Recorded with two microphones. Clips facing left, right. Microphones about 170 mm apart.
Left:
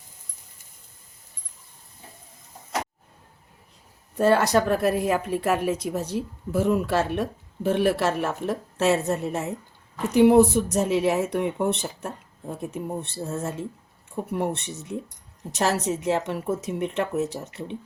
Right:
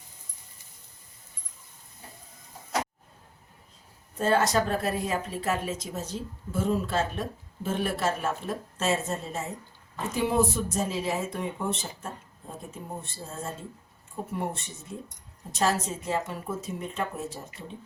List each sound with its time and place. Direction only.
4.2 s speech: 65° left (ahead or behind)